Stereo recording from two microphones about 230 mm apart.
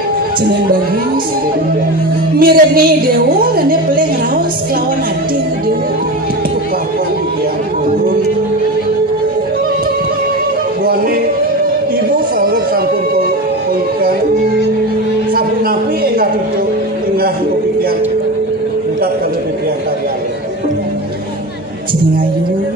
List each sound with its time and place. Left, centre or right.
2.3 s music: right
12.4 s music: right